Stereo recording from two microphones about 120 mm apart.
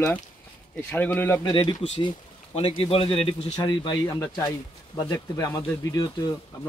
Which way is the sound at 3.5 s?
40° left (ahead or behind).